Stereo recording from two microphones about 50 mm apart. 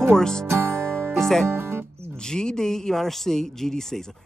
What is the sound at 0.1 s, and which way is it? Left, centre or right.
Speech, centre.